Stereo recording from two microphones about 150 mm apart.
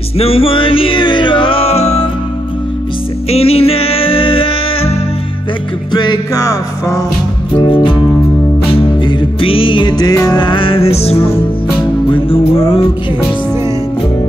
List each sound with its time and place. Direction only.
0.2 s music: 40° left (ahead or behind)
3.3 s music: 40° left (ahead or behind); by 7.0 s 20° left (ahead or behind)
7.5 s music: 35° left (ahead or behind)